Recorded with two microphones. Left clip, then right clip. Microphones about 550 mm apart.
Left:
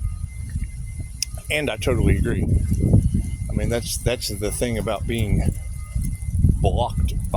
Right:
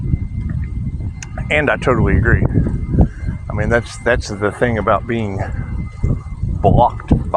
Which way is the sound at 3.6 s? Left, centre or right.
Left.